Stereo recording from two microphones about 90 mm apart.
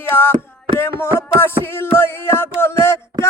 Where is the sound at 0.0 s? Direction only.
25° left (ahead or behind).